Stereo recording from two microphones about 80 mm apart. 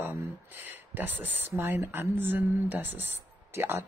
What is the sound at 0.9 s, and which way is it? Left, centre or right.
Speech, right.